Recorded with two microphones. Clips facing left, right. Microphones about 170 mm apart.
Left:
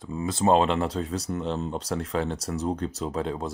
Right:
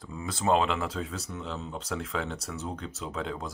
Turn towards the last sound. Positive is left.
turn(degrees=40)  # may be behind; listen again after turning